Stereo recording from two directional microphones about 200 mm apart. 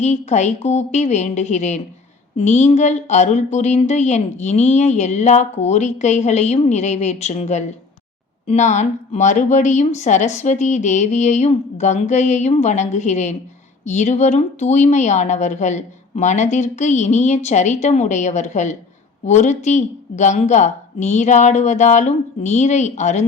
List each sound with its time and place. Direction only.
0.0 s speech: 35° left (ahead or behind)